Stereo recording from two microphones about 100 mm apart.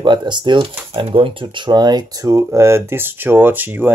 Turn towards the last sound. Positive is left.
turn(degrees=-20)  # may be behind; listen again after turning